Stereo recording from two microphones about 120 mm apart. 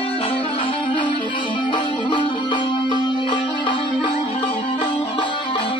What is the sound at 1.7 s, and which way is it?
Music, 40° left (ahead or behind).